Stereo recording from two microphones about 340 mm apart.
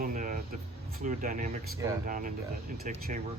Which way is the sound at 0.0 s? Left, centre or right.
Right.